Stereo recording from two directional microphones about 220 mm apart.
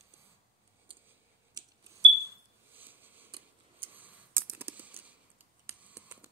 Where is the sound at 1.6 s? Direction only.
15° right (ahead or behind).